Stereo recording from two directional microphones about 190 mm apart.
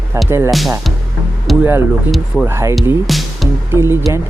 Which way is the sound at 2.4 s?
15° right (ahead or behind).